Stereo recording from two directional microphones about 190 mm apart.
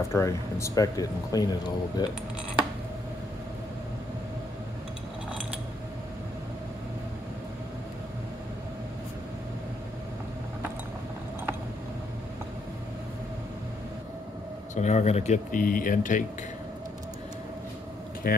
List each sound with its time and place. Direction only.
0.1 s speech: 15° left (ahead or behind)
14.8 s speech: 35° left (ahead or behind)
18.2 s speech: 50° left (ahead or behind)